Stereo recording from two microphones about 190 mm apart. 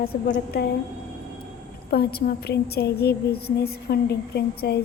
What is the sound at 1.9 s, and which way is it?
A woman's voice, 55° left (ahead or behind).